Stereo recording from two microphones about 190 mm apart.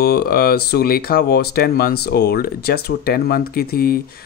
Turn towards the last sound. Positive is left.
turn(degrees=50)  # may be behind; listen again after turning